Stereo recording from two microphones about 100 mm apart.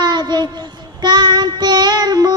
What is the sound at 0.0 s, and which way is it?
Child singing, 45° right (ahead or behind).